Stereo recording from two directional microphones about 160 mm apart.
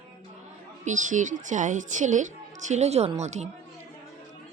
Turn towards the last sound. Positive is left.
turn(degrees=-45)  # may be behind; listen again after turning